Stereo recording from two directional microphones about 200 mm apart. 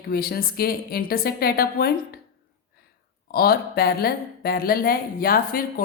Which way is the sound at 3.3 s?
50° left (ahead or behind).